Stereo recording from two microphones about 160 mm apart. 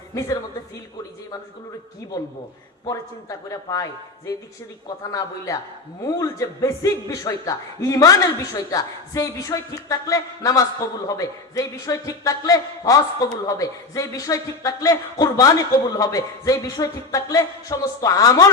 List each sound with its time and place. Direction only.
0.1 s a woman's voice: 20° left (ahead or behind)
2.8 s a man's voice: 20° left (ahead or behind)
5.5 s a man's voice: 20° left (ahead or behind)